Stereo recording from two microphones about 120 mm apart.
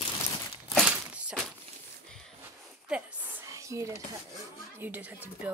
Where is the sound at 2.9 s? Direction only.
15° right (ahead or behind).